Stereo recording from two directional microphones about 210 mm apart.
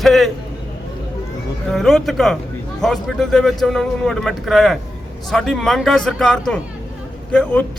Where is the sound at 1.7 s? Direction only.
Centre (ahead or behind).